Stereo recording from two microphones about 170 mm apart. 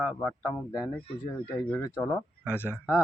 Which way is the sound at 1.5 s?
10° left (ahead or behind).